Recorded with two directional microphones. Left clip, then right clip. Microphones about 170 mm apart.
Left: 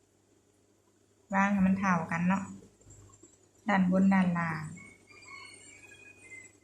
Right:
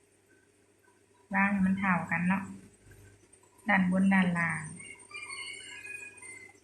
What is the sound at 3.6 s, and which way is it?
Speech, 15° left (ahead or behind).